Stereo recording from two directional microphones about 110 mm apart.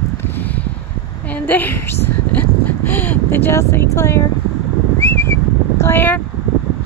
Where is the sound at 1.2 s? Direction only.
15° left (ahead or behind).